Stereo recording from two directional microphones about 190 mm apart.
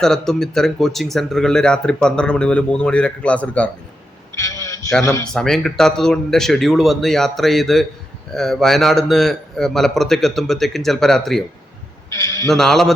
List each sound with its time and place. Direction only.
0.0 s speech: 5° left (ahead or behind)
4.4 s music: 15° left (ahead or behind)
5.3 s speech: 5° left (ahead or behind)
12.1 s a man's voice: 15° left (ahead or behind)
12.5 s speech: centre (ahead or behind)